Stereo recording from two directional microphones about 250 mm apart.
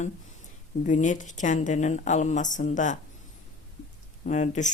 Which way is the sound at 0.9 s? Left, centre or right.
Left.